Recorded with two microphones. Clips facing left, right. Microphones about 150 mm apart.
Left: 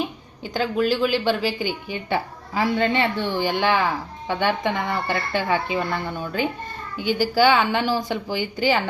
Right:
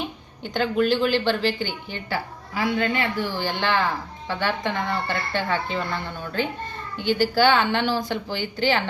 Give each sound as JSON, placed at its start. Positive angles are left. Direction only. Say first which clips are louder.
{"t": 0.4, "sound": "speech", "louder": "even", "side_deg": 5}
{"t": 2.0, "sound": "a woman's voice", "louder": "left 4 dB", "side_deg": 25}
{"t": 3.3, "sound": "speech", "louder": "left 4 dB", "side_deg": 15}